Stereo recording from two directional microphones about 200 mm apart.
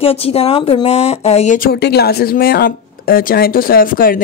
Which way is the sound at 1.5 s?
50° left (ahead or behind).